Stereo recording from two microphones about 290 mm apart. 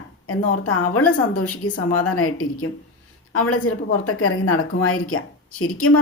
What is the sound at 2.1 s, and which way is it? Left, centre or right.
Speech, left.